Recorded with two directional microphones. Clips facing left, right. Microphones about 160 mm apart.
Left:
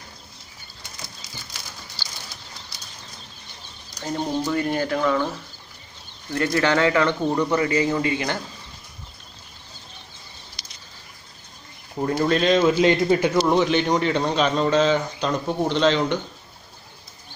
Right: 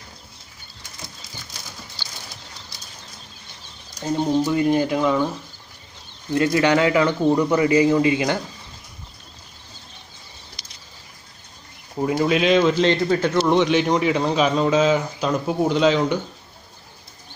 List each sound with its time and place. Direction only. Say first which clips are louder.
4.0 s speech: right 5 dB; 15° right (ahead or behind)
6.3 s speech: right 3 dB; 15° right (ahead or behind)
12.0 s speech: right 1 dB; 10° right (ahead or behind)
12.7 s a man's voice: left 1 dB; 10° left (ahead or behind); by 16.2 s 10° right (ahead or behind)